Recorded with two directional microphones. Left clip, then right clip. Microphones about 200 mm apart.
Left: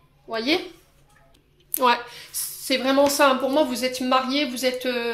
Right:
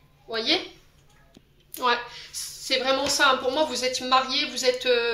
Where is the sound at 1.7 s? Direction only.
55° left (ahead or behind).